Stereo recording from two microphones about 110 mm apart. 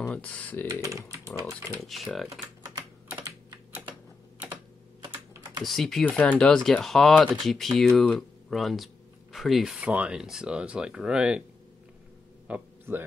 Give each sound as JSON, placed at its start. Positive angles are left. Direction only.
{"t": 0.1, "sound": "speech", "side_deg": 10}
{"t": 0.7, "sound": "speech", "side_deg": -30}
{"t": 1.8, "sound": "speech", "side_deg": 0}
{"t": 5.6, "sound": "speech", "side_deg": 0}
{"t": 6.0, "sound": "speech", "side_deg": 10}
{"t": 12.4, "sound": "a sound", "side_deg": -15}